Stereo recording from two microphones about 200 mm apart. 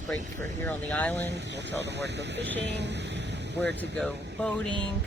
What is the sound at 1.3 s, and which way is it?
Speech, 60° right (ahead or behind).